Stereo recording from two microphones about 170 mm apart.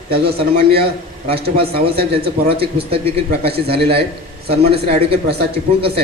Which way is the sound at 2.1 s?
35° right (ahead or behind).